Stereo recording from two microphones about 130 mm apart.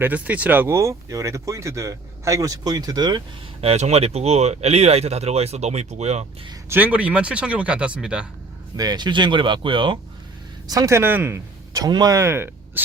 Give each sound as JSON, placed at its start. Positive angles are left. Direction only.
{"t": 0.0, "sound": "speech", "side_deg": -10}
{"t": 3.6, "sound": "speech", "side_deg": -55}
{"t": 6.7, "sound": "speech", "side_deg": -15}
{"t": 8.7, "sound": "speech", "side_deg": -30}
{"t": 10.7, "sound": "speech", "side_deg": -25}